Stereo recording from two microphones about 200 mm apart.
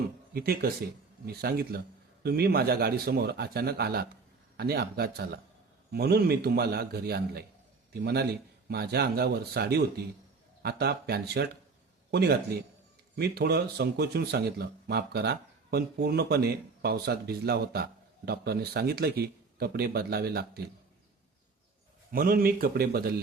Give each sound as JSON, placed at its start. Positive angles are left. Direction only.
{"t": 0.3, "sound": "a man's voice", "side_deg": -50}
{"t": 22.1, "sound": "speech", "side_deg": -45}